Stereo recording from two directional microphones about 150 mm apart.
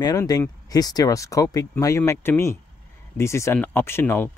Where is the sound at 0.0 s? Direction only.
25° left (ahead or behind).